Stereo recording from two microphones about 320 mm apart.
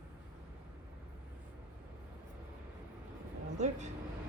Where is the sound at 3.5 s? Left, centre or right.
Right.